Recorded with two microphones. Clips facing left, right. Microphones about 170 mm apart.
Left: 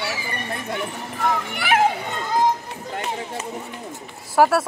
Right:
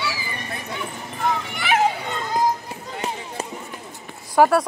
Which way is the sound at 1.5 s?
55° left (ahead or behind).